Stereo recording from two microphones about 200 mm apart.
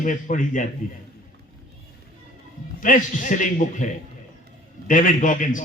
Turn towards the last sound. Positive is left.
turn(degrees=40)  # may be behind; listen again after turning